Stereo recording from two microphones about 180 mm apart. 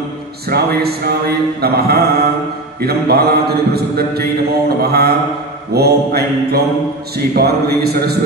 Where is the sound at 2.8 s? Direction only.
60° right (ahead or behind).